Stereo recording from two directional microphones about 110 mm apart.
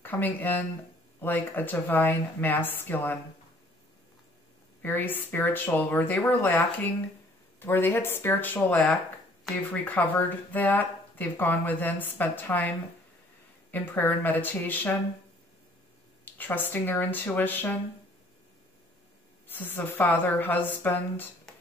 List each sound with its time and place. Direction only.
0.0 s speech: 15° left (ahead or behind)
4.8 s speech: 15° left (ahead or behind)
16.3 s speech: 15° left (ahead or behind)
19.4 s speech: 20° left (ahead or behind)